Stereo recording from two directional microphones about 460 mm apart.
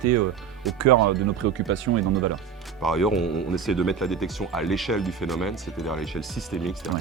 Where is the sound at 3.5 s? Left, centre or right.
Centre.